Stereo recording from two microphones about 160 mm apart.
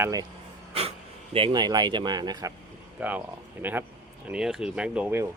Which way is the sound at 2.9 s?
10° right (ahead or behind).